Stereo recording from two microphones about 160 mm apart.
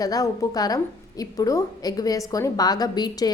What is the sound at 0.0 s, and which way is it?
A woman's voice, 20° left (ahead or behind).